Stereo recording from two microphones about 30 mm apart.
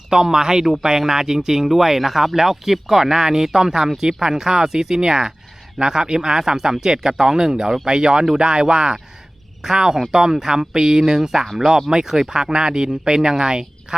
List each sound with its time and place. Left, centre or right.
0.1 s speech: right
4.2 s speech: right